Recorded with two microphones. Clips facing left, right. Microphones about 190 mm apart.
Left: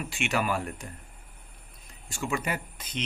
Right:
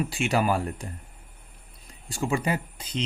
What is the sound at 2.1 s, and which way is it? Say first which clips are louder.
Speech: right 5 dB; 35° right (ahead or behind).